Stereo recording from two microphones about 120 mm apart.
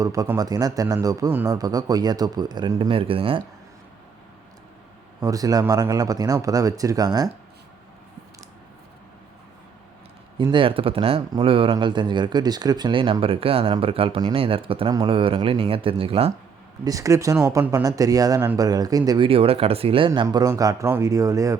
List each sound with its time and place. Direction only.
0.0 s speech: 30° right (ahead or behind)
2.9 s speech: 50° right (ahead or behind)
5.2 s speech: 30° right (ahead or behind)
10.3 s speech: 45° right (ahead or behind)
16.8 s speech: 30° right (ahead or behind)
19.3 s speech: 50° right (ahead or behind)
20.1 s speech: 35° right (ahead or behind)